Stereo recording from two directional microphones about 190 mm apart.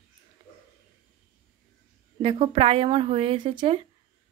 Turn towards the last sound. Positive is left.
turn(degrees=-25)  # may be behind; listen again after turning